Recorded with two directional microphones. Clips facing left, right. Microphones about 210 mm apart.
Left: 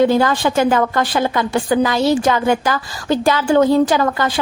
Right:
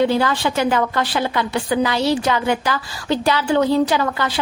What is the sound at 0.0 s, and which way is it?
A woman's voice, 45° left (ahead or behind).